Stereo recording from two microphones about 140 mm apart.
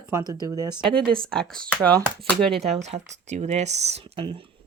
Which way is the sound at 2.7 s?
50° right (ahead or behind).